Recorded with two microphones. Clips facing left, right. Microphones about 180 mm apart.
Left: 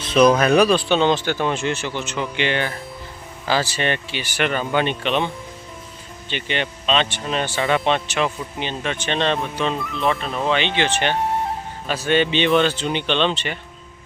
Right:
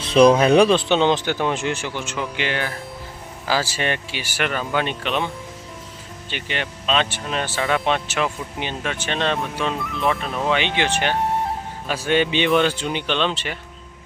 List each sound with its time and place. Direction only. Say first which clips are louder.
0.0 s speech: right 2 dB; 30° right (ahead or behind); by 13.6 s 5° right (ahead or behind)